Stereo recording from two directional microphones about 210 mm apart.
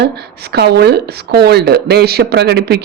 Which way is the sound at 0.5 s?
50° right (ahead or behind).